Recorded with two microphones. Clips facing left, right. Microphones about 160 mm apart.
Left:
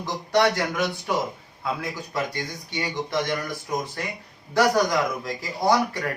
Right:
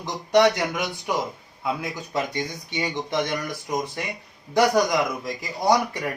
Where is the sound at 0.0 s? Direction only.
20° right (ahead or behind).